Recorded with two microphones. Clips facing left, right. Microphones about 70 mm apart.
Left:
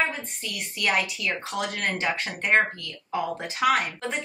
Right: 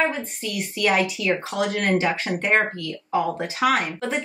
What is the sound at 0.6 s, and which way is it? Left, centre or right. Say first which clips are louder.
Speech: right 5 dB; centre.